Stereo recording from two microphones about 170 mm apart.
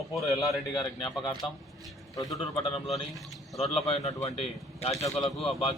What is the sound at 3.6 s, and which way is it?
A man's voice, 35° left (ahead or behind).